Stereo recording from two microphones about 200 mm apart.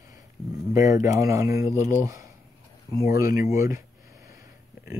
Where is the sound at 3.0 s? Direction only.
50° left (ahead or behind).